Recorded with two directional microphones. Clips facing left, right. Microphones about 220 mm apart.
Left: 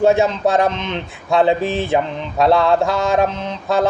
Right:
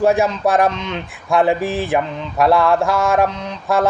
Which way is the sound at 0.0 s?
25° left (ahead or behind).